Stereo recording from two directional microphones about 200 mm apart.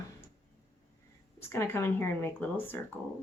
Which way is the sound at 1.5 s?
10° left (ahead or behind).